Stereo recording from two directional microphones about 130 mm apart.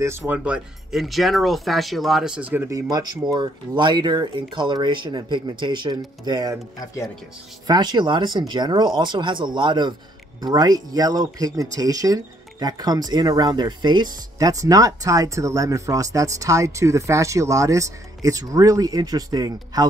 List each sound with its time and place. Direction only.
0.0 s speech: 20° right (ahead or behind)
0.4 s speech: 5° right (ahead or behind)
2.5 s speech: 20° right (ahead or behind)
2.9 s speech: 30° right (ahead or behind)
7.6 s speech: 35° right (ahead or behind)